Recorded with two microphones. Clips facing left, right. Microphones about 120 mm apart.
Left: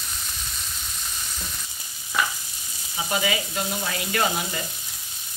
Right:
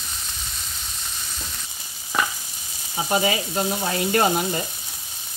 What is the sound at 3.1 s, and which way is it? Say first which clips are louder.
Speech: right 4 dB; 35° right (ahead or behind).